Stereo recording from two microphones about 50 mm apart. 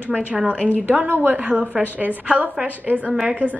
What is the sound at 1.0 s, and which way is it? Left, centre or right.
Speech, right.